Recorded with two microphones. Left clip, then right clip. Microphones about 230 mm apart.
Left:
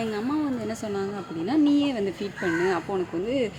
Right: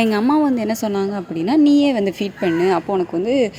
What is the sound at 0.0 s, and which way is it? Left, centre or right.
Speech, right.